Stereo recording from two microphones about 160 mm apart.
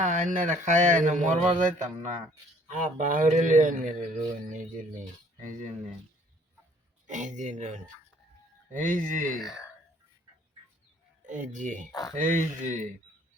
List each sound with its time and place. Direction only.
0.0 s speech: 50° right (ahead or behind)
7.1 s speech: 50° right (ahead or behind)
11.3 s speech: 50° right (ahead or behind)